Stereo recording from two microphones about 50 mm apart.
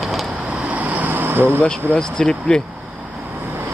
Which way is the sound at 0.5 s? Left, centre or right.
Right.